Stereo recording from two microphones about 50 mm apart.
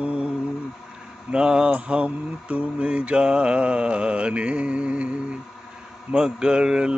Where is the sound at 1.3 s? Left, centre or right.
Centre.